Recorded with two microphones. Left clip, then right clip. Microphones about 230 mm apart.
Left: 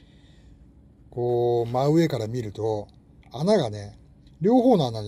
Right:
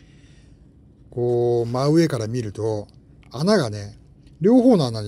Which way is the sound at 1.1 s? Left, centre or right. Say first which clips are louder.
Right 3 dB; centre.